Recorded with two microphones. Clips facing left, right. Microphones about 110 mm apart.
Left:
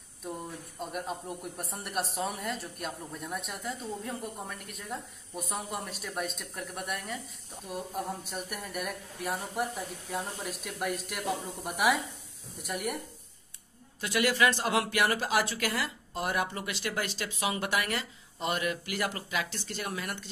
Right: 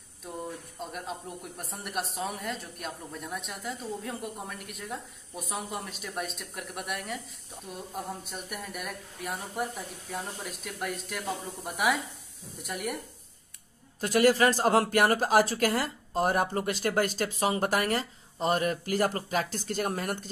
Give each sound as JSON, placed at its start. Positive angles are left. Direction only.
{"t": 0.7, "sound": "speech", "side_deg": 5}
{"t": 14.0, "sound": "speech", "side_deg": -40}